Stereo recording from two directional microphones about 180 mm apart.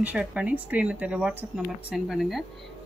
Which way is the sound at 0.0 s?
5° right (ahead or behind).